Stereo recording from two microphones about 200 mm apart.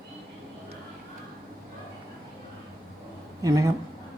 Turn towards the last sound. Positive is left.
turn(degrees=-15)  # may be behind; listen again after turning